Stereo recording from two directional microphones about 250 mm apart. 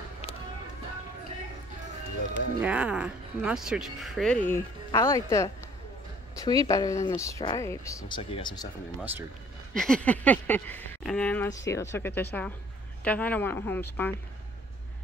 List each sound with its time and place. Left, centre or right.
2.6 s speech: centre
6.3 s a sound: centre
6.7 s speech: centre
9.8 s speech: centre